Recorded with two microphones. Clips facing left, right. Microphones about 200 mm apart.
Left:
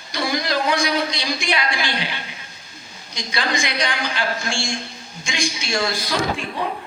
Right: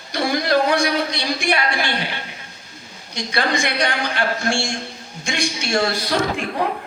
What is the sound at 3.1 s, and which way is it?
A woman's voice, 60° right (ahead or behind).